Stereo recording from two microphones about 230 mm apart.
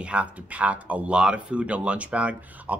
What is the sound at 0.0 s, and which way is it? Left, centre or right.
Speech, centre.